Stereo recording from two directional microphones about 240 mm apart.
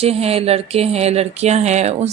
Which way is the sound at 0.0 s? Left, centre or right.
Right.